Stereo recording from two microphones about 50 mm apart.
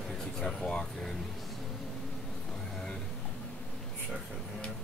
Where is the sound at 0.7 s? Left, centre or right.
Centre.